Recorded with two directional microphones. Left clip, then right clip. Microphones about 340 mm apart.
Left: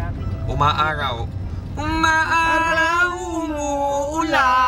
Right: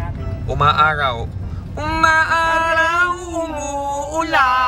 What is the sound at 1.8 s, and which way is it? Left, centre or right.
Cat, centre.